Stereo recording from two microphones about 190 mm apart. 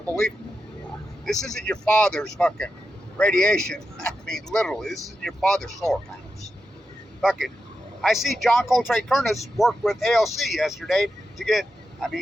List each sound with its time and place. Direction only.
1.2 s speech: centre (ahead or behind)
7.2 s speech: centre (ahead or behind)